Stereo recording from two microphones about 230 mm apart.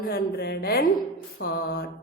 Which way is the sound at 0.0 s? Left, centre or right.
Left.